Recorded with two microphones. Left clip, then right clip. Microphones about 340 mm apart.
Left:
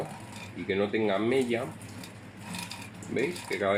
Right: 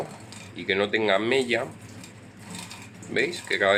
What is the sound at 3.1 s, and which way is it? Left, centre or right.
Speech, right.